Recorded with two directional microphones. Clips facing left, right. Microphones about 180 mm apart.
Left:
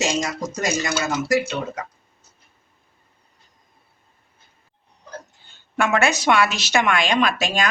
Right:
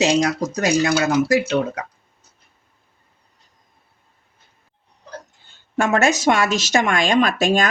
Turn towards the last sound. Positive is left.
turn(degrees=-50)  # may be behind; listen again after turning